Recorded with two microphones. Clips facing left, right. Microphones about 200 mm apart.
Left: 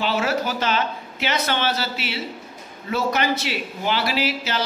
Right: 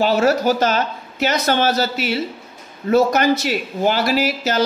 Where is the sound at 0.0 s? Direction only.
40° right (ahead or behind).